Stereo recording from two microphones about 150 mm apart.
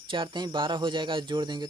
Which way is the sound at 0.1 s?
30° right (ahead or behind).